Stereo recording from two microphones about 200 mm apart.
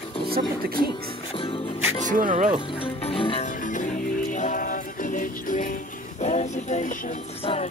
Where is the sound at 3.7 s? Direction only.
40° left (ahead or behind).